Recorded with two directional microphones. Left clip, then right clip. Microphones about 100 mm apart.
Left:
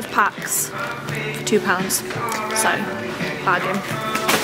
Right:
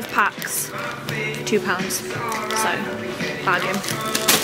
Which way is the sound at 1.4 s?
25° left (ahead or behind).